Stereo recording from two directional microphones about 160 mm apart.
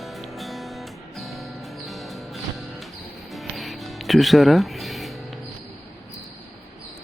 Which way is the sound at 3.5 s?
Centre (ahead or behind).